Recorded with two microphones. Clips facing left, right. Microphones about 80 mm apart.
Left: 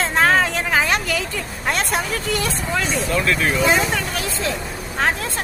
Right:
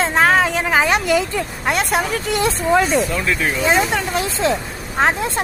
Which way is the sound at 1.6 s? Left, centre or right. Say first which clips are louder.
Right 3 dB; centre.